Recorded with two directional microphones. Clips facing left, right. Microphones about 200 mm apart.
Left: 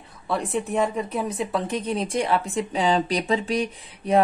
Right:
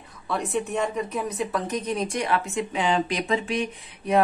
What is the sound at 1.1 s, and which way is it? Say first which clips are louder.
A woman's voice: left 2 dB; 30° left (ahead or behind).